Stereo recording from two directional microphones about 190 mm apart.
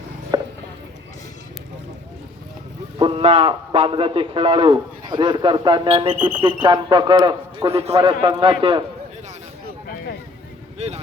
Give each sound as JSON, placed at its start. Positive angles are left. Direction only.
{"t": 0.3, "sound": "a sound", "side_deg": -20}
{"t": 3.0, "sound": "a man's voice", "side_deg": -30}
{"t": 10.8, "sound": "speech", "side_deg": -35}